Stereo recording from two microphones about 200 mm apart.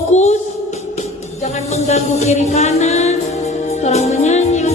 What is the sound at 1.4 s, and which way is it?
Music, 35° left (ahead or behind).